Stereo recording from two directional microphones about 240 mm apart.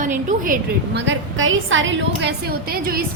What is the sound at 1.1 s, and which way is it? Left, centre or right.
A woman's voice, right.